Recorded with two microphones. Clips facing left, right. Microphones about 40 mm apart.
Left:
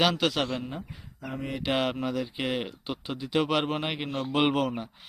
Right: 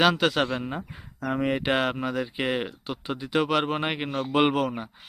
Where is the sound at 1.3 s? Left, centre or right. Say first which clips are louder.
Right 9 dB; right.